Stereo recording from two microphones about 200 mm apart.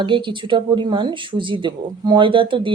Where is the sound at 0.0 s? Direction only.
25° right (ahead or behind).